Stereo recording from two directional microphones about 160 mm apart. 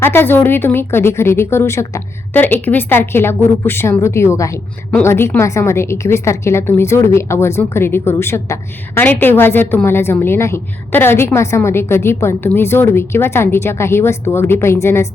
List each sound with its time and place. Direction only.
0.0 s a woman's voice: 15° left (ahead or behind)